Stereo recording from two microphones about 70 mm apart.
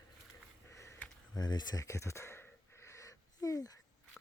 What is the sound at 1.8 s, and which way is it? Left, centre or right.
Speech, left.